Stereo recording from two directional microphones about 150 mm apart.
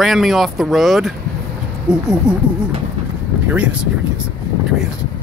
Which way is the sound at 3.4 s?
10° right (ahead or behind).